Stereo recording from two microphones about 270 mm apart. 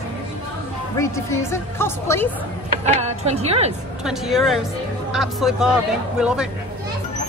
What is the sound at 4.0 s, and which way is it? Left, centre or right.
Speech, centre.